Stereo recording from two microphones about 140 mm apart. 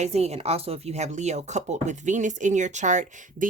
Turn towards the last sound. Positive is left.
turn(degrees=-60)  # may be behind; listen again after turning